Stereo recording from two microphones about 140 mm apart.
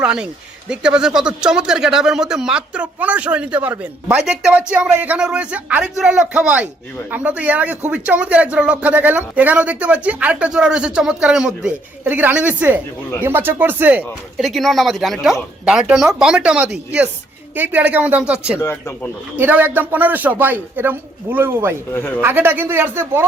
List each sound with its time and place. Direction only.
0.0 s speech: 5° right (ahead or behind)
14.4 s speech: centre (ahead or behind)
18.6 s speech: 20° left (ahead or behind)
19.4 s speech: 15° right (ahead or behind)
21.9 s speech: 15° left (ahead or behind)
22.2 s speech: 15° right (ahead or behind)